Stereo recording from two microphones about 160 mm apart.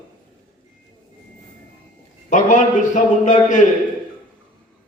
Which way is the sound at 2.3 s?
50° left (ahead or behind).